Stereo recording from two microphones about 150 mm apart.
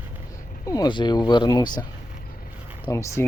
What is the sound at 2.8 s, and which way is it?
Speech, 20° left (ahead or behind).